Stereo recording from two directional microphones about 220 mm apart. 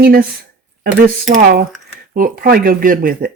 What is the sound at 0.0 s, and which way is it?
Speech, 45° right (ahead or behind).